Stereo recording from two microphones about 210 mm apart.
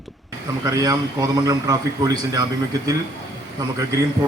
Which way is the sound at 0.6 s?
15° right (ahead or behind).